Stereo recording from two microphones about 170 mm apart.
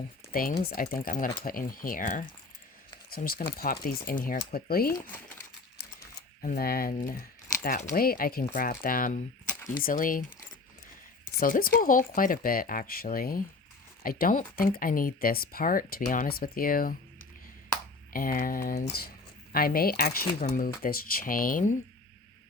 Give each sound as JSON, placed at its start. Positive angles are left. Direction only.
{"t": 0.3, "sound": "speech", "side_deg": 60}
{"t": 6.4, "sound": "speech", "side_deg": 60}
{"t": 11.3, "sound": "speech", "side_deg": 55}
{"t": 18.1, "sound": "speech", "side_deg": 55}